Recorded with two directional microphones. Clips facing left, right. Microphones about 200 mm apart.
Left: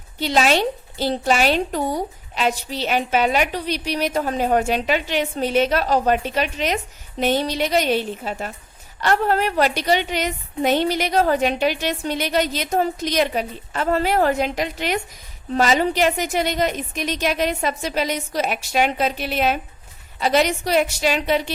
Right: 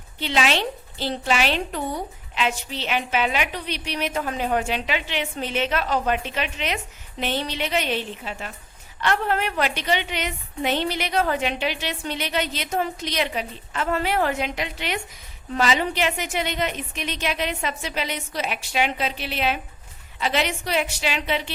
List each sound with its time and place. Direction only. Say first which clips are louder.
0.2 s a woman's voice: left 5 dB; 40° left (ahead or behind)